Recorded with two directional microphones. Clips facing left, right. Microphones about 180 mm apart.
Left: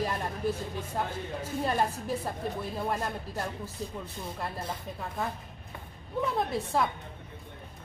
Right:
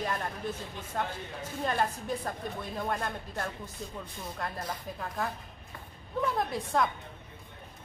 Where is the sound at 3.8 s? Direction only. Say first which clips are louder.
Left 4 dB; 35° left (ahead or behind).